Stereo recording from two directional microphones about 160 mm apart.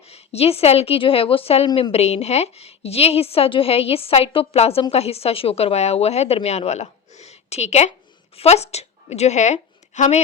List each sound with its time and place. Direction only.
0.0 s a woman's voice: 40° left (ahead or behind)